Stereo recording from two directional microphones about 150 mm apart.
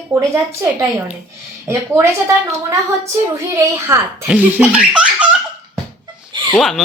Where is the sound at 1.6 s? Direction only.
15° right (ahead or behind).